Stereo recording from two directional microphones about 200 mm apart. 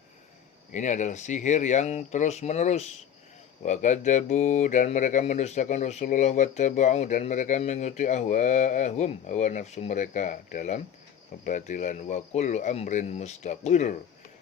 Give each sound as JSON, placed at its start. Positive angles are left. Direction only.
{"t": 0.7, "sound": "speech", "side_deg": 40}